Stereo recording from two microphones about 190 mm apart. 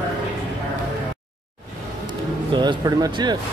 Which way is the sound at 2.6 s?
20° right (ahead or behind).